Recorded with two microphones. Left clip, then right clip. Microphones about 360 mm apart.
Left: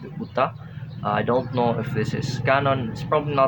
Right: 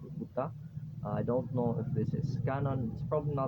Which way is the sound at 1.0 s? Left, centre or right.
Right.